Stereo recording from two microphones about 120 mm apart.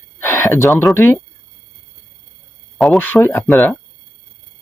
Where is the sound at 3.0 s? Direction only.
15° left (ahead or behind).